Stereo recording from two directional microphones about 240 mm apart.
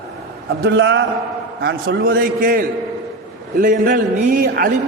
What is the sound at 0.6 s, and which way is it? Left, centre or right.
A man's voice, right.